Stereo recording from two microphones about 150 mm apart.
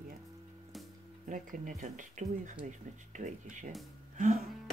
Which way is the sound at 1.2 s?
60° right (ahead or behind).